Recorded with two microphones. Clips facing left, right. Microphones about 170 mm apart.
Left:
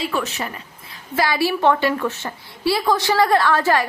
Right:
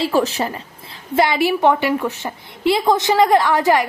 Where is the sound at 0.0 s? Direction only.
30° right (ahead or behind).